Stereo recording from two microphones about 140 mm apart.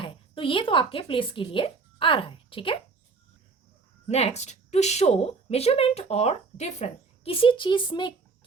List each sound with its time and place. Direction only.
0.0 s speech: 40° left (ahead or behind)
4.1 s a woman's voice: 50° left (ahead or behind)